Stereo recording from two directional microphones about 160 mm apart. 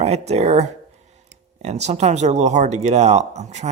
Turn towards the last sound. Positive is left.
turn(degrees=-45)  # may be behind; listen again after turning